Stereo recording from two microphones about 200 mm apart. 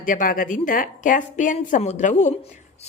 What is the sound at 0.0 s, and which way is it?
A woman's voice, 45° left (ahead or behind).